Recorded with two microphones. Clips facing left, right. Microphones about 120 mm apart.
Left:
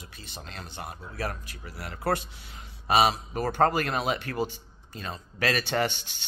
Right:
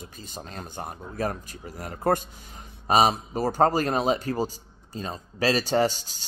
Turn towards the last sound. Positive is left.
turn(degrees=-35)  # may be behind; listen again after turning